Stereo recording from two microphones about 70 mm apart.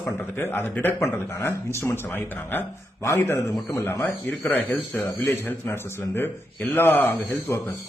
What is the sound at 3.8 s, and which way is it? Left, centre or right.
A man's voice, left.